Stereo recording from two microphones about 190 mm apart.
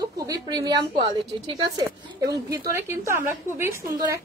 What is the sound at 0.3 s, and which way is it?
A woman's voice, 20° right (ahead or behind).